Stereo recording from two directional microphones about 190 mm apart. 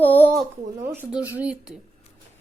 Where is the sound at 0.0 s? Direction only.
10° left (ahead or behind).